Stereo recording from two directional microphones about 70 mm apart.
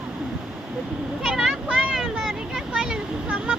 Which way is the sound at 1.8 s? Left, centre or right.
Centre.